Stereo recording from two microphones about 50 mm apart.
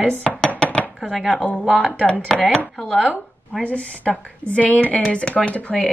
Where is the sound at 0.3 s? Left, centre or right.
Centre.